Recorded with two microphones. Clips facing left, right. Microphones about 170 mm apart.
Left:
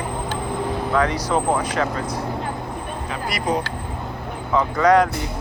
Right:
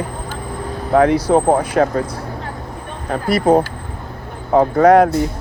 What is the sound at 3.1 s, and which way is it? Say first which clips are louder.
Speech: right 10 dB; 55° right (ahead or behind).